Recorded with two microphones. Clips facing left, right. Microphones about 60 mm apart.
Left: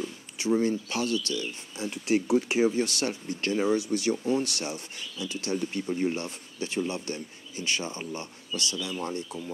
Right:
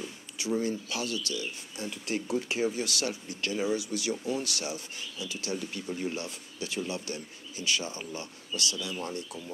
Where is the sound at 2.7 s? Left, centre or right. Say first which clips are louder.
Left 4 dB; left.